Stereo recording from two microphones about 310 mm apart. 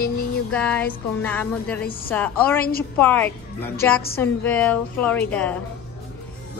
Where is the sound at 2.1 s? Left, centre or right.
Centre.